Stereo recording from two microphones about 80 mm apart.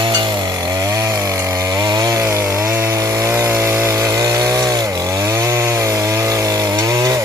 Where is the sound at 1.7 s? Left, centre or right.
Right.